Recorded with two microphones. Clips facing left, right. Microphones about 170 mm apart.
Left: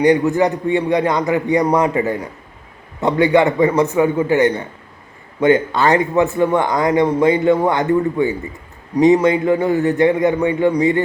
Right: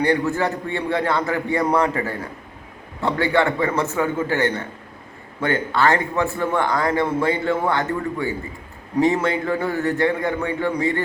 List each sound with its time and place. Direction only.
0.0 s a man's voice: 15° left (ahead or behind)